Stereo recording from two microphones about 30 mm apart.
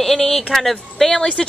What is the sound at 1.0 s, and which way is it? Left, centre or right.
Speech, centre.